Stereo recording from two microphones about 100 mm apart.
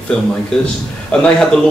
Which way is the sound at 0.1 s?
5° left (ahead or behind).